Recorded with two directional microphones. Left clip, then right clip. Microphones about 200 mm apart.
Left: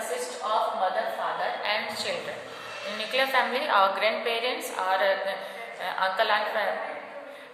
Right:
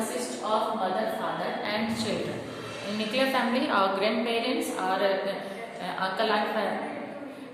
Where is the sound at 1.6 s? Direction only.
25° left (ahead or behind).